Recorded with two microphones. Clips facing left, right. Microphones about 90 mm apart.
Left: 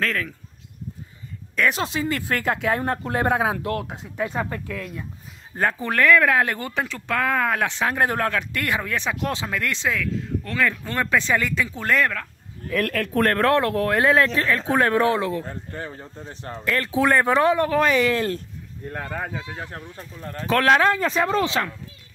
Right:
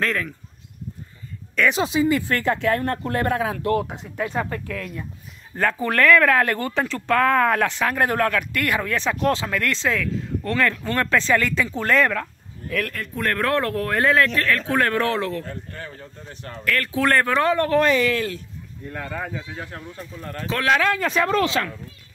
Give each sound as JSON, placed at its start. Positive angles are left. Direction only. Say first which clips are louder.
{"t": 0.0, "sound": "speech", "louder": "right 1 dB", "side_deg": 0}
{"t": 1.5, "sound": "speech", "louder": "right 2 dB", "side_deg": 0}
{"t": 2.2, "sound": "speech", "louder": "right 2 dB", "side_deg": 5}
{"t": 3.6, "sound": "speech", "louder": "right 5 dB", "side_deg": 0}
{"t": 5.6, "sound": "speech", "louder": "right 1 dB", "side_deg": 20}
{"t": 7.6, "sound": "speech", "louder": "right 1 dB", "side_deg": 20}
{"t": 9.9, "sound": "speech", "louder": "right 1 dB", "side_deg": 5}
{"t": 11.5, "sound": "speech", "louder": "right 2 dB", "side_deg": 5}
{"t": 12.8, "sound": "speech", "louder": "left 6 dB", "side_deg": 70}
{"t": 13.2, "sound": "speech", "louder": "left 3 dB", "side_deg": 35}
{"t": 13.5, "sound": "speech", "louder": "left 3 dB", "side_deg": 20}
{"t": 18.9, "sound": "speech", "louder": "even", "side_deg": 40}
{"t": 20.4, "sound": "speech", "louder": "left 3 dB", "side_deg": 40}